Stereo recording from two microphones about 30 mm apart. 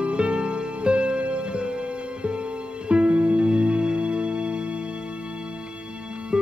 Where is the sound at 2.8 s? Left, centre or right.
Right.